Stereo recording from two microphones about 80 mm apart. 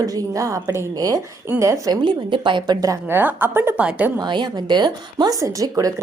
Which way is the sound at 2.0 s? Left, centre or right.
Right.